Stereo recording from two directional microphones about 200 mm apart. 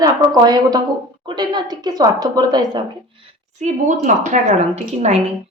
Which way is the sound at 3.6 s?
35° right (ahead or behind).